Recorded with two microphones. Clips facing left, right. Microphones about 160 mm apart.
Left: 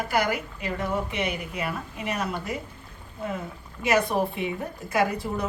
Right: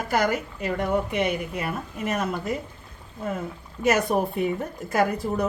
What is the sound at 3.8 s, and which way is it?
A woman's voice, 45° right (ahead or behind).